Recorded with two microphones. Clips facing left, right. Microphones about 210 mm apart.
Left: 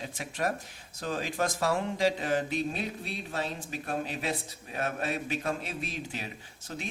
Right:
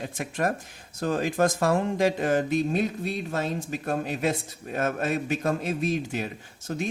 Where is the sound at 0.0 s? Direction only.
50° right (ahead or behind).